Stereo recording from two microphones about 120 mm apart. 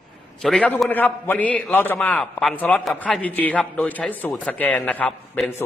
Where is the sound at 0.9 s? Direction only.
15° left (ahead or behind).